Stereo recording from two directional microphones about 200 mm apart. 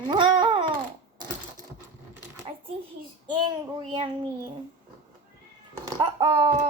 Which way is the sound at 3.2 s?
25° right (ahead or behind).